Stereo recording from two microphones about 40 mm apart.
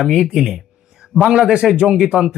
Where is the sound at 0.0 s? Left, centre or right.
Centre.